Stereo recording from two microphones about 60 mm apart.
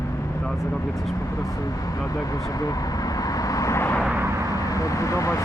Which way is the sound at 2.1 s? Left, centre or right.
Left.